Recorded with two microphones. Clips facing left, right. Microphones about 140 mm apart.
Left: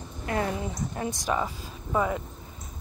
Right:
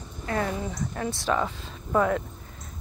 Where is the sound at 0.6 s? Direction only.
20° left (ahead or behind).